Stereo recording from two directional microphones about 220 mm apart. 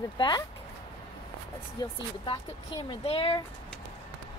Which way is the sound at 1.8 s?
20° left (ahead or behind).